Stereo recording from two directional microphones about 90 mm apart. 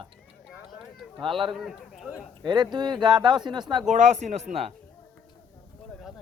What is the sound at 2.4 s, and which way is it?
Speech, 55° right (ahead or behind).